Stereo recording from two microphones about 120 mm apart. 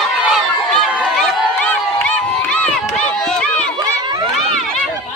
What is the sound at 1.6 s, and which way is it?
Run, 10° left (ahead or behind).